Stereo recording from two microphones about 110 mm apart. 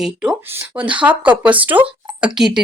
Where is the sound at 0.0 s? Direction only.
5° right (ahead or behind).